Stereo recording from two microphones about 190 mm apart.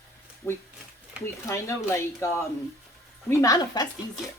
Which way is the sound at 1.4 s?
15° left (ahead or behind).